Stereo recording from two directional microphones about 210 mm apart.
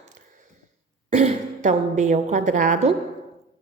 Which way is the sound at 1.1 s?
35° right (ahead or behind).